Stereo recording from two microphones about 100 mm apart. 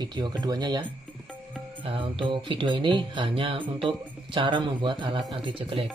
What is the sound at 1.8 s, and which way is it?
Speech, 60° right (ahead or behind).